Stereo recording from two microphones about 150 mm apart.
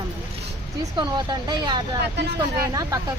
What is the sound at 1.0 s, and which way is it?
A woman's voice, 30° right (ahead or behind).